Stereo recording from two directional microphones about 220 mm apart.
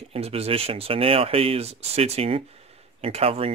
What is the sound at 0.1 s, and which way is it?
Speech, 25° right (ahead or behind).